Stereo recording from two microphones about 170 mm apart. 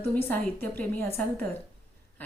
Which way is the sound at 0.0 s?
10° left (ahead or behind).